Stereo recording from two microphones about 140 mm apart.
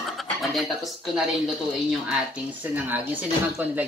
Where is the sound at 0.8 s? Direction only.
Centre (ahead or behind).